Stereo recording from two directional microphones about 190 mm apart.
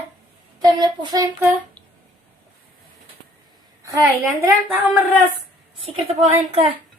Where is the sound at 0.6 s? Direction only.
20° right (ahead or behind).